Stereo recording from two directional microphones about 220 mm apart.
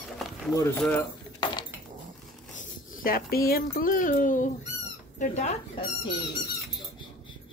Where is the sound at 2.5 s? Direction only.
35° left (ahead or behind).